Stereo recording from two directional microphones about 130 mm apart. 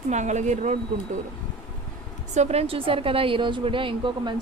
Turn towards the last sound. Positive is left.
turn(degrees=-40)  # may be behind; listen again after turning